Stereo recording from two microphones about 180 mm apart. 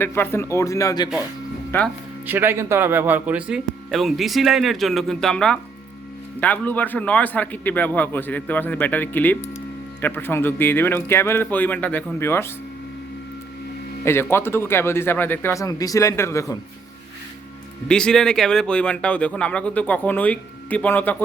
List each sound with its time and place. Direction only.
0.0 s speech: 15° left (ahead or behind)
2.2 s speech: 10° right (ahead or behind); by 12.5 s 15° left (ahead or behind)
14.0 s speech: 15° left (ahead or behind)
17.8 s speech: 5° left (ahead or behind)